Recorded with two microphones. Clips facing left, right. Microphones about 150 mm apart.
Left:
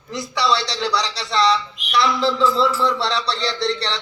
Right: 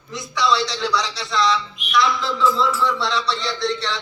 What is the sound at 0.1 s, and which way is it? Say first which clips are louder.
A man's voice: even; 35° left (ahead or behind).